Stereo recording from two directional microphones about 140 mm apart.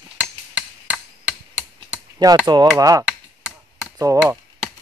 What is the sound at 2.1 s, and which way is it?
Speech, 20° right (ahead or behind).